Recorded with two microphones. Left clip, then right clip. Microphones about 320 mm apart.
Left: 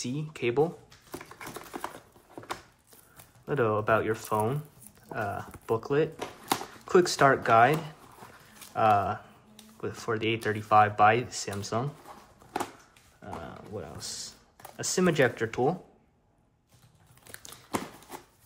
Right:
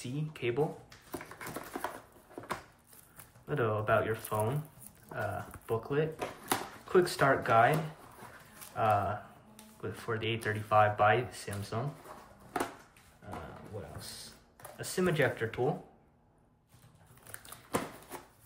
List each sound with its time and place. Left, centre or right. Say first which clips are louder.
0.0 s speech: left 5 dB; centre
3.4 s speech: left 5 dB; centre
8.7 s speech: left 6 dB; centre
13.9 s speech: left 7 dB; centre